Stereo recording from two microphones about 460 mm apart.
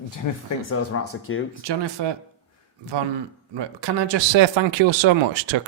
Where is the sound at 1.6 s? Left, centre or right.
Right.